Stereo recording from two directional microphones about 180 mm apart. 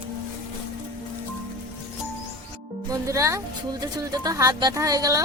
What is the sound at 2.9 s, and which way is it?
Speech, 15° right (ahead or behind).